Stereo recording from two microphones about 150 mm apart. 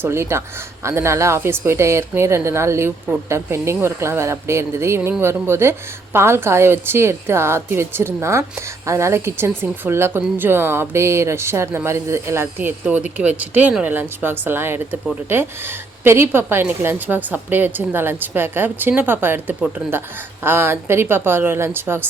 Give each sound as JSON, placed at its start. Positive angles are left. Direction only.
{"t": 0.0, "sound": "a woman's voice", "side_deg": -15}